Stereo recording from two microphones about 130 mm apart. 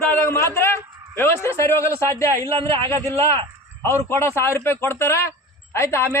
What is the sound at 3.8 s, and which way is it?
A man's voice, 20° left (ahead or behind).